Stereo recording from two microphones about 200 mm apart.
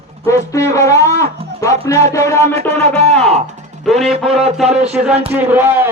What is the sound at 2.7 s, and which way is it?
Speech, 30° right (ahead or behind).